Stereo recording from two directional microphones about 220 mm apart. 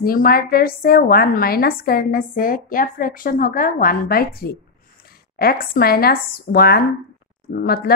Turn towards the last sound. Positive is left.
turn(degrees=40)  # may be behind; listen again after turning